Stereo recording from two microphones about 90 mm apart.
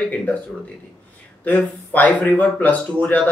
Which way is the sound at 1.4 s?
15° left (ahead or behind).